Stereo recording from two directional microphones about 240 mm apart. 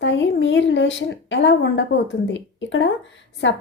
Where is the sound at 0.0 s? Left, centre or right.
Left.